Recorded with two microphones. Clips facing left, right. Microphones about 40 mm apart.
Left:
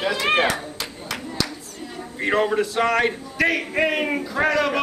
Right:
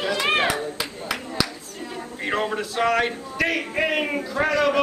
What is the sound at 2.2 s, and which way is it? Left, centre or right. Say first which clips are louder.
A man's voice: left 5 dB; centre.